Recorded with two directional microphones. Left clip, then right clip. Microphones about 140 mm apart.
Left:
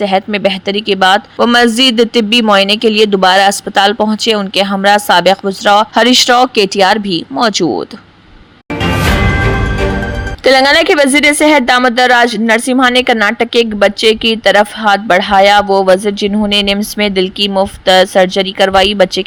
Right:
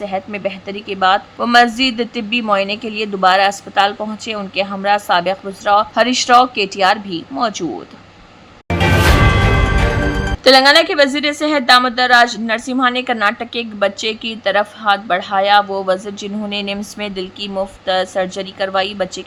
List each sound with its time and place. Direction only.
0.0 s speech: 40° left (ahead or behind)
10.4 s speech: 45° left (ahead or behind)